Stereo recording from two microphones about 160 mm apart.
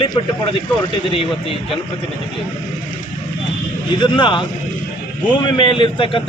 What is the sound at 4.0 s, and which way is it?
A man's voice, 30° left (ahead or behind).